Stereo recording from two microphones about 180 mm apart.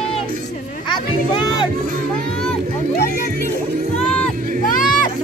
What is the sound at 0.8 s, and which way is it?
Speech, 30° left (ahead or behind).